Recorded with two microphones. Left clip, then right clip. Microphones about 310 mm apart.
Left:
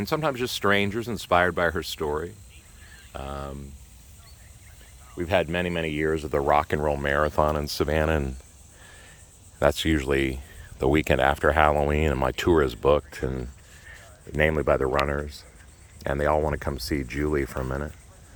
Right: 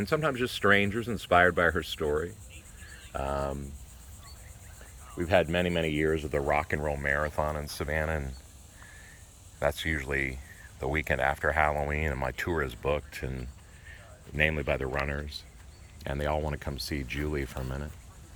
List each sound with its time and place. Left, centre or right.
0.2 s speech: centre
5.1 s speech: centre; by 8.3 s left
9.6 s speech: left